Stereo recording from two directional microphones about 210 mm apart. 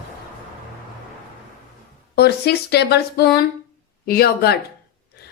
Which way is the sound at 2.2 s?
50° left (ahead or behind).